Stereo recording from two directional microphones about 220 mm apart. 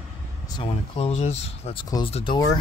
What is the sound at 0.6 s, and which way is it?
Speech, 25° left (ahead or behind).